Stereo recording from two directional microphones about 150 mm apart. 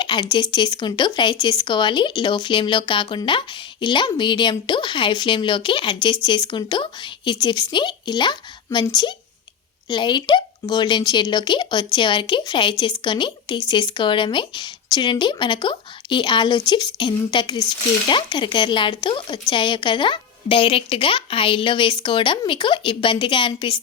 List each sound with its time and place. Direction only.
0.0 s a woman's voice: 30° left (ahead or behind)